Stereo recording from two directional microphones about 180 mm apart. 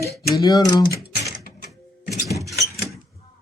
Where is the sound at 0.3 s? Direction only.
20° left (ahead or behind).